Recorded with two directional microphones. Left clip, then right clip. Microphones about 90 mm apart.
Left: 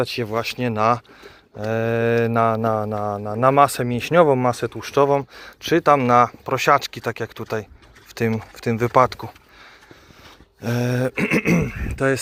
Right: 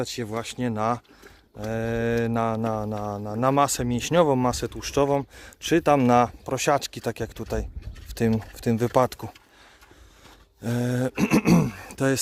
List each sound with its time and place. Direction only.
0.0 s mantra: 15° right (ahead or behind)
3.4 s speech: 20° right (ahead or behind); by 5.8 s 45° right (ahead or behind)
5.8 s speech: 70° right (ahead or behind)
6.4 s speech: 45° right (ahead or behind); by 9.3 s 65° right (ahead or behind)
10.6 s speech: 30° right (ahead or behind)
11.9 s speech: 65° right (ahead or behind)